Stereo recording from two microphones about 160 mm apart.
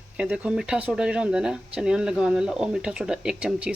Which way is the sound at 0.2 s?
5° right (ahead or behind).